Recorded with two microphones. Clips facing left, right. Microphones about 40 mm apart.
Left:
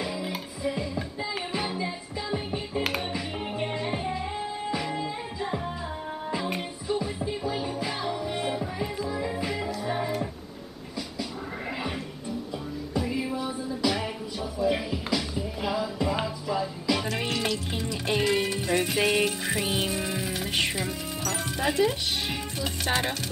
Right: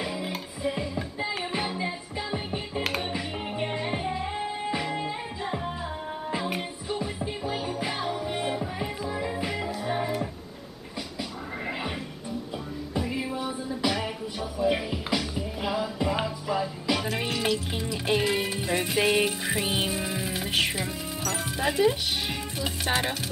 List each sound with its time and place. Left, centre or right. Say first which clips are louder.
0.0 s music: even; centre
1.8 s music: right 1 dB; centre
2.8 s music: right 1 dB; centre
4.4 s music: right 1 dB; right
6.3 s music: even; centre
13.1 s music: left 1 dB; centre
17.0 s music: even; centre